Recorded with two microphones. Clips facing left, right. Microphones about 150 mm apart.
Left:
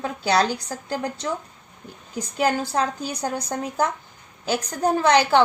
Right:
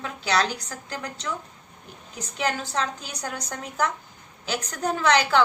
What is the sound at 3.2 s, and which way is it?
Speech, 30° left (ahead or behind).